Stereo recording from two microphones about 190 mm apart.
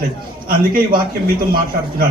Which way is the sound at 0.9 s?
50° right (ahead or behind).